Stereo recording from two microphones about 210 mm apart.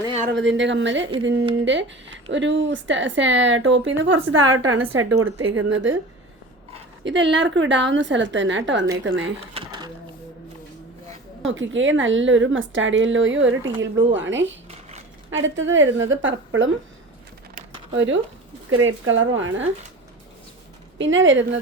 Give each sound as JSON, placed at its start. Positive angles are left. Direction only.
{"t": 0.3, "sound": "speech", "side_deg": -60}
{"t": 7.0, "sound": "speech", "side_deg": -60}
{"t": 9.6, "sound": "a sound", "side_deg": -20}
{"t": 11.4, "sound": "speech", "side_deg": -65}
{"t": 14.7, "sound": "a sound", "side_deg": -30}
{"t": 15.3, "sound": "speech", "side_deg": -65}
{"t": 17.9, "sound": "speech", "side_deg": -65}
{"t": 21.0, "sound": "speech", "side_deg": -60}